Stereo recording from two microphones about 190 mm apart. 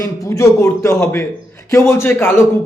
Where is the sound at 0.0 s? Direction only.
15° left (ahead or behind).